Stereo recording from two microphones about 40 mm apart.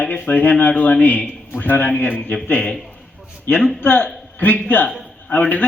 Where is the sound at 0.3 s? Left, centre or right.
Left.